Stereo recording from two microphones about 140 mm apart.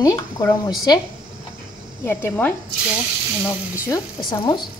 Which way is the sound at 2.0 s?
15° left (ahead or behind).